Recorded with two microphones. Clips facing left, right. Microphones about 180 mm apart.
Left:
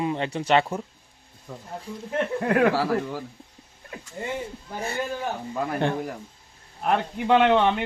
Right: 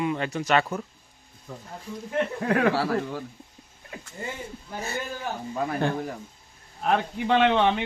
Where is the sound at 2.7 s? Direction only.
15° left (ahead or behind).